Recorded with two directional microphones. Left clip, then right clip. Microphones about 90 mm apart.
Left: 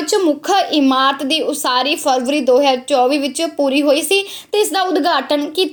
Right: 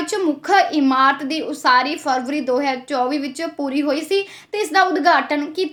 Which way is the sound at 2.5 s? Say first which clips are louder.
Left 8 dB; 25° left (ahead or behind).